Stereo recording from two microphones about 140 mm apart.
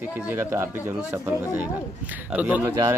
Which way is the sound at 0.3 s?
15° right (ahead or behind).